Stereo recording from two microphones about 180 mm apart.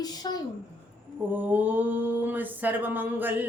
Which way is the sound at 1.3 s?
10° right (ahead or behind).